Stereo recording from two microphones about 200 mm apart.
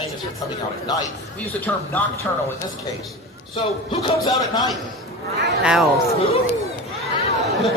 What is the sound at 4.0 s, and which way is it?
Speech, 20° left (ahead or behind).